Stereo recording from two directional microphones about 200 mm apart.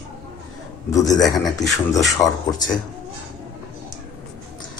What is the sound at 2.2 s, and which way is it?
Speech, 25° left (ahead or behind).